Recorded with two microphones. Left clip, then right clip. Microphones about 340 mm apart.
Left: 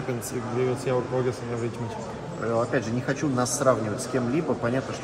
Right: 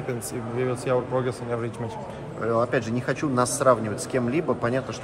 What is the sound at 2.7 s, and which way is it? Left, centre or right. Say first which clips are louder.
Speech: right 1 dB; right.